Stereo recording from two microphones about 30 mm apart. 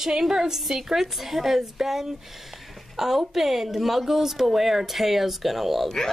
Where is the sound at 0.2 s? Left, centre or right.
Centre.